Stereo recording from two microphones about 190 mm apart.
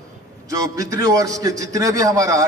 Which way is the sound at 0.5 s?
15° right (ahead or behind).